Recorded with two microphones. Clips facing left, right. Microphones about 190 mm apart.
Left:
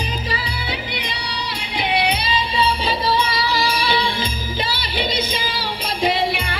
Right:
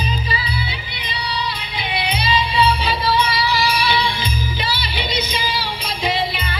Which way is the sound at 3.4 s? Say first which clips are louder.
Right 1 dB; 50° left (ahead or behind).